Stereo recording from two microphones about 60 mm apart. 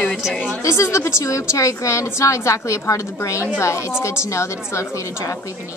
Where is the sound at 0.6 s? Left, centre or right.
Left.